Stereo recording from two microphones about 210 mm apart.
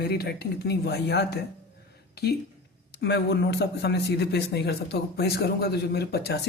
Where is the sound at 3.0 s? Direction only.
50° left (ahead or behind).